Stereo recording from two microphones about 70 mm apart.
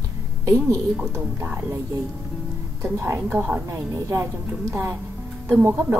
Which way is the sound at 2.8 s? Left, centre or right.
Right.